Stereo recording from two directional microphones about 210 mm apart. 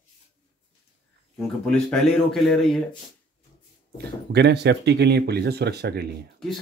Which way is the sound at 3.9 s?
55° right (ahead or behind).